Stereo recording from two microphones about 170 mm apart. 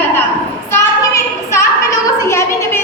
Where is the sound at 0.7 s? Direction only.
15° left (ahead or behind).